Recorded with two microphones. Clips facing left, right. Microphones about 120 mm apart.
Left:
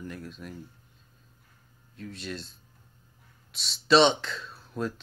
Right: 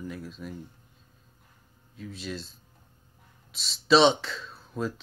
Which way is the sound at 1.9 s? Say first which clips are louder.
Right 1 dB; centre (ahead or behind).